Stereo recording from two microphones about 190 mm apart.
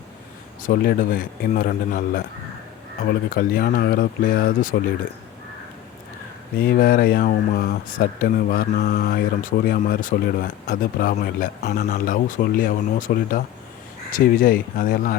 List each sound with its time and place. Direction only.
0.6 s speech: 50° left (ahead or behind)
6.6 s speech: 50° left (ahead or behind)